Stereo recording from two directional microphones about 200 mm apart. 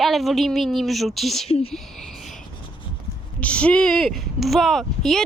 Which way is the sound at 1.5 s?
30° left (ahead or behind).